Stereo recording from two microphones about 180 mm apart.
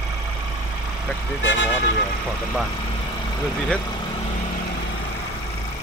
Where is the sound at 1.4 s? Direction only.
85° left.